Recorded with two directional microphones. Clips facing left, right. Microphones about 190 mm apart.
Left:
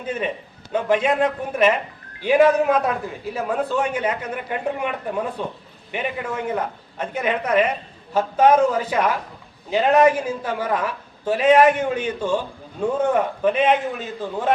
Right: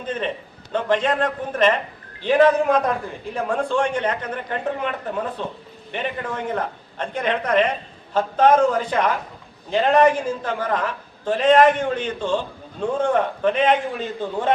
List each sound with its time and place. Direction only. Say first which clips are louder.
0.0 s a man's voice: even; 10° left (ahead or behind)